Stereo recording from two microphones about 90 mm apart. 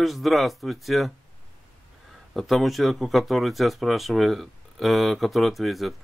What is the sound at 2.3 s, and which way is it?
Speech, centre (ahead or behind).